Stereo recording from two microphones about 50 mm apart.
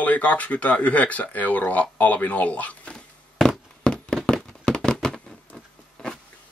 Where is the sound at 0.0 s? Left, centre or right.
Left.